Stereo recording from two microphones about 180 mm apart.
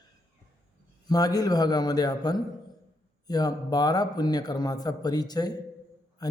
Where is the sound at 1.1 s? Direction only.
20° left (ahead or behind).